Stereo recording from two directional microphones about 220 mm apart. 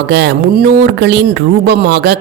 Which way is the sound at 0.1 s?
50° right (ahead or behind).